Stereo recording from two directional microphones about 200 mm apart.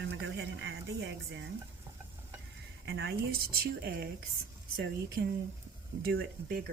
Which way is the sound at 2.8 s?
55° right (ahead or behind).